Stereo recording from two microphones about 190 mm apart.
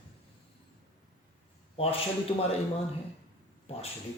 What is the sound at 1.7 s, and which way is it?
Speech, 30° left (ahead or behind).